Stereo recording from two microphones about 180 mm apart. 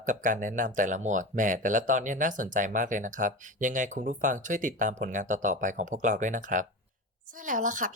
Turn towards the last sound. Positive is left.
turn(degrees=-45)  # may be behind; listen again after turning